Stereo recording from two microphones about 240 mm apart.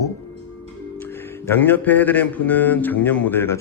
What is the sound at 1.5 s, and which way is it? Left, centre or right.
A man's voice, centre.